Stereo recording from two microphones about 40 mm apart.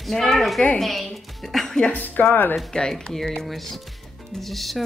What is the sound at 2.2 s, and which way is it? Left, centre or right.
Speech, left.